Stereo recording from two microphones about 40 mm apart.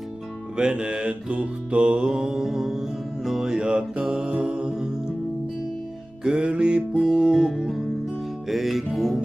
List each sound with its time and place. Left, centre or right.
0.6 s mantra: right
2.0 s music: centre
3.4 s mantra: right
6.2 s mantra: right
7.0 s music: centre